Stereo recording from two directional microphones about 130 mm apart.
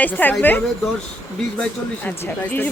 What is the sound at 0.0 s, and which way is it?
Speech, 15° left (ahead or behind).